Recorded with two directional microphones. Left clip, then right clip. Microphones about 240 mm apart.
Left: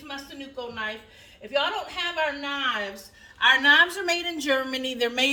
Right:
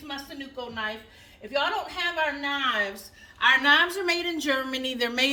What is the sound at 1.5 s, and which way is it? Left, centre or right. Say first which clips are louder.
Speech: left 1 dB; centre.